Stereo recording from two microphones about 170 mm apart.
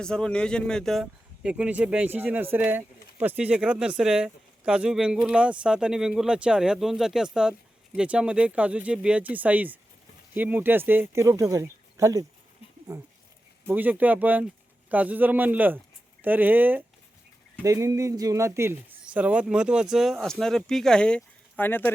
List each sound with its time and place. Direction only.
0.0 s speech: 5° left (ahead or behind)